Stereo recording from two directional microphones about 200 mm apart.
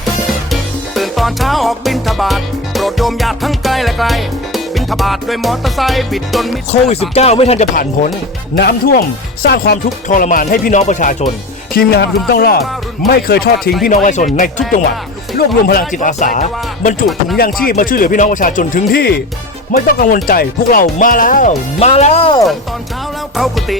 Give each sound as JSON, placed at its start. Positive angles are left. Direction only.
{"t": 0.9, "sound": "music", "side_deg": 0}
{"t": 6.7, "sound": "speech", "side_deg": 30}
{"t": 8.5, "sound": "speech", "side_deg": 50}
{"t": 10.1, "sound": "speech", "side_deg": 40}
{"t": 11.7, "sound": "speech", "side_deg": 50}
{"t": 13.8, "sound": "speech", "side_deg": 40}
{"t": 23.4, "sound": "music", "side_deg": 0}